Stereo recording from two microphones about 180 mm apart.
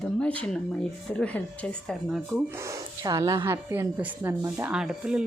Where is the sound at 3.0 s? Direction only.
20° right (ahead or behind).